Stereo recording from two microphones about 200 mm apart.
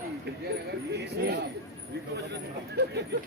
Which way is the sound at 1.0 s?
55° right (ahead or behind).